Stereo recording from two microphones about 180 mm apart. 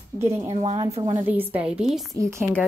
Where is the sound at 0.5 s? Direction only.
35° right (ahead or behind).